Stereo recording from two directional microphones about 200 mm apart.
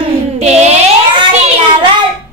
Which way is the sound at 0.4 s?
35° right (ahead or behind).